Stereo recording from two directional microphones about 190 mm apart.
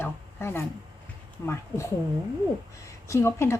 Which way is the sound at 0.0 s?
10° left (ahead or behind).